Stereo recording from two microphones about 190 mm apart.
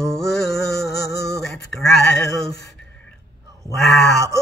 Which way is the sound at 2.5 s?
15° left (ahead or behind).